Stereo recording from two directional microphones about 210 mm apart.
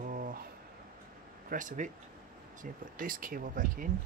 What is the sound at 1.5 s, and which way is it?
Speech, 40° right (ahead or behind).